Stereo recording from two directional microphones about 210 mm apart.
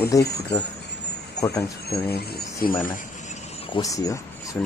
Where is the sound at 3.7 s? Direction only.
15° left (ahead or behind).